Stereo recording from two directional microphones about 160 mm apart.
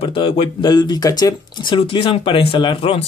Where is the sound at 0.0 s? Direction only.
35° left (ahead or behind).